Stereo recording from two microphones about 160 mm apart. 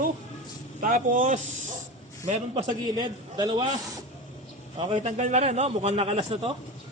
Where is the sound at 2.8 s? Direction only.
25° right (ahead or behind).